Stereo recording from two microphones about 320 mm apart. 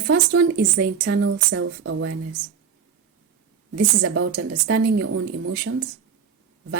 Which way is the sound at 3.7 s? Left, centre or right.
Right.